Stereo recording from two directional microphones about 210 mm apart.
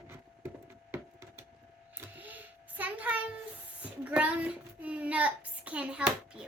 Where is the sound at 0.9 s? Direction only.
10° right (ahead or behind).